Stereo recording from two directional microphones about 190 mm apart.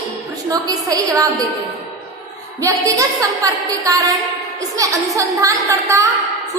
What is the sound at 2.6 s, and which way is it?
Speech, 15° right (ahead or behind).